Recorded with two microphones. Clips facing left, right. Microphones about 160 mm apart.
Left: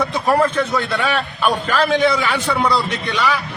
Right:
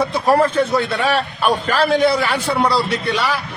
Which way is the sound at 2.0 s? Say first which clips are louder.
Right 1 dB; 35° right (ahead or behind).